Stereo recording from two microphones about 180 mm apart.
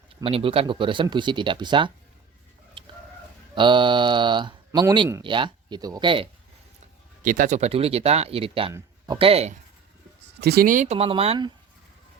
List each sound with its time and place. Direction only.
0.2 s speech: 30° right (ahead or behind)
2.8 s chicken: 25° right (ahead or behind)
3.5 s speech: 25° right (ahead or behind)
7.2 s speech: 50° right (ahead or behind)
10.4 s speech: 60° right (ahead or behind); by 11.5 s 30° right (ahead or behind)